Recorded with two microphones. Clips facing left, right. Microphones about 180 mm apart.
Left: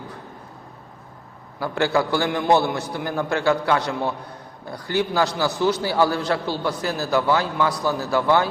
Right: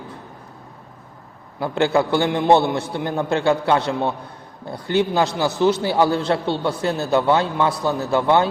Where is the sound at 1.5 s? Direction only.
20° right (ahead or behind).